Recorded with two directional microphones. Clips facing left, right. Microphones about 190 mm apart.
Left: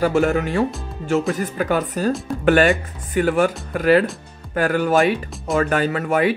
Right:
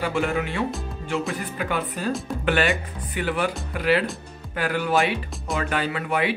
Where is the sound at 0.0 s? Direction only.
45° left (ahead or behind).